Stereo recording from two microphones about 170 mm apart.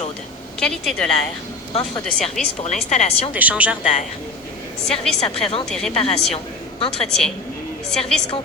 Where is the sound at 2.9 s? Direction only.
40° left (ahead or behind).